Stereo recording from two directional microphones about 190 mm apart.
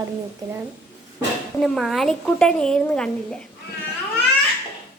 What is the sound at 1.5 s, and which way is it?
A woman's voice, centre (ahead or behind).